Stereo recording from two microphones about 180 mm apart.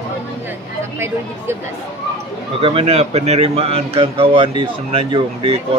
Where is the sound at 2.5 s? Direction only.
30° right (ahead or behind).